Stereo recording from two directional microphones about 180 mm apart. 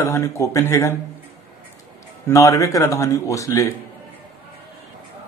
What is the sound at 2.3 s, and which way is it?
A man's voice, 15° left (ahead or behind).